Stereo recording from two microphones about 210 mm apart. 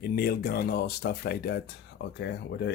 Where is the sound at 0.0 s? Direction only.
45° left (ahead or behind).